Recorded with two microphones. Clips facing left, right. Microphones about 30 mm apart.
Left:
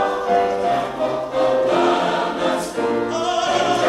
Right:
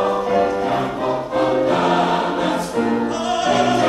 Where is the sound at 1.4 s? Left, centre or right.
Centre.